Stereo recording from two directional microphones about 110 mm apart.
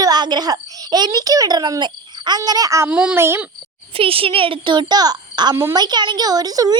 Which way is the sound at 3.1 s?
20° right (ahead or behind).